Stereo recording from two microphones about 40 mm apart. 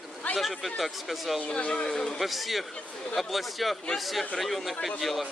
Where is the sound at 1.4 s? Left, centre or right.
Left.